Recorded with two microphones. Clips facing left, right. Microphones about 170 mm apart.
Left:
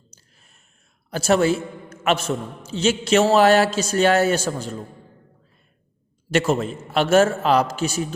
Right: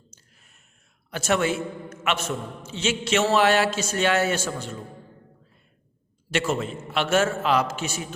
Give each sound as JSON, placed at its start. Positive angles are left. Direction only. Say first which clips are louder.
{"t": 1.1, "sound": "a man's voice", "louder": "left 5 dB", "side_deg": 35}
{"t": 6.3, "sound": "a man's voice", "louder": "left 5 dB", "side_deg": 40}